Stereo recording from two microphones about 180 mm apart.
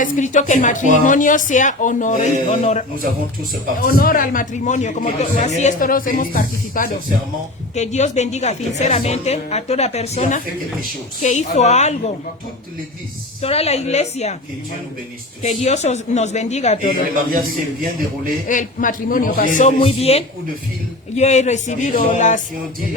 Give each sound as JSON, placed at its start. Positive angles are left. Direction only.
{"t": 0.0, "sound": "a man's voice", "side_deg": 45}
{"t": 3.8, "sound": "a man's voice", "side_deg": 55}
{"t": 7.8, "sound": "a woman's voice", "side_deg": 40}
{"t": 13.4, "sound": "a woman's voice", "side_deg": 35}
{"t": 15.4, "sound": "a woman's voice", "side_deg": 40}
{"t": 18.4, "sound": "a man's voice", "side_deg": 45}